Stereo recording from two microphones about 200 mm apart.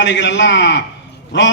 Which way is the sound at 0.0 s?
65° left (ahead or behind).